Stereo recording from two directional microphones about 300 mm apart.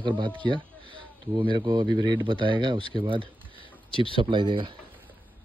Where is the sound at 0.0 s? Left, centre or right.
Centre.